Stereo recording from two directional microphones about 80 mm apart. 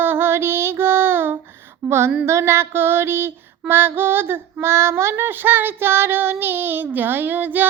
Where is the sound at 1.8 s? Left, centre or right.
Centre.